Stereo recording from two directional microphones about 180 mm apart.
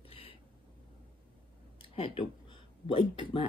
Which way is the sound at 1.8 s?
30° left (ahead or behind).